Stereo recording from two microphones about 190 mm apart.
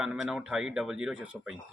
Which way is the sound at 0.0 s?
5° right (ahead or behind).